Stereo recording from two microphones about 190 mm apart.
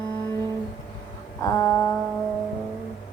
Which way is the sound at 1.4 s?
15° left (ahead or behind).